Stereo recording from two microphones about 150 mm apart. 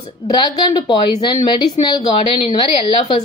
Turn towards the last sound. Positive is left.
turn(degrees=35)  # may be behind; listen again after turning